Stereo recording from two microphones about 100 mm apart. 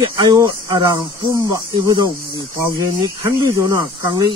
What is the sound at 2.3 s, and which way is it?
Speech, 35° right (ahead or behind).